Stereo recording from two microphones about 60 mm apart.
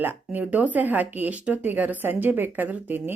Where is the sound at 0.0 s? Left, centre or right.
Right.